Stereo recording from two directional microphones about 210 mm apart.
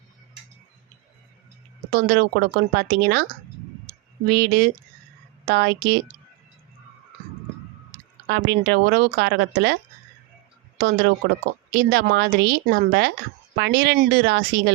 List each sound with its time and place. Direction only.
1.9 s speech: 45° right (ahead or behind)
4.3 s speech: 50° right (ahead or behind)
8.3 s speech: 55° right (ahead or behind)
10.8 s a woman's voice: 50° right (ahead or behind)